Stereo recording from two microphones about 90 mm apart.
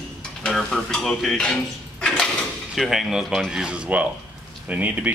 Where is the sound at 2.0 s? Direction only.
10° left (ahead or behind).